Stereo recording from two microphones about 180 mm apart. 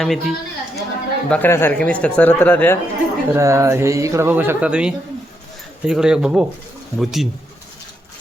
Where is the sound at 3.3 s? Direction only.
15° right (ahead or behind).